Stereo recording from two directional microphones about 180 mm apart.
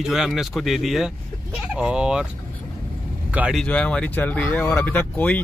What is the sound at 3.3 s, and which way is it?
Speech, 5° right (ahead or behind).